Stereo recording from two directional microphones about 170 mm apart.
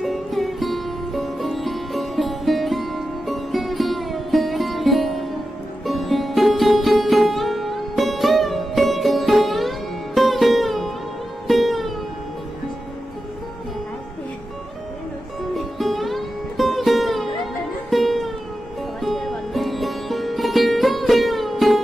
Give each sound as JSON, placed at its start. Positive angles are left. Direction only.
{"t": 0.0, "sound": "music", "side_deg": 0}
{"t": 15.5, "sound": "music", "side_deg": 0}